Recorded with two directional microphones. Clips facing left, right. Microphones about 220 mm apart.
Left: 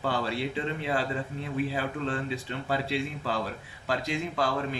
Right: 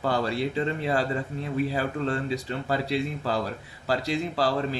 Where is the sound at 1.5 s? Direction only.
40° right (ahead or behind).